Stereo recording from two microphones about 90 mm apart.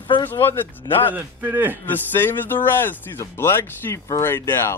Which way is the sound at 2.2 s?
20° left (ahead or behind).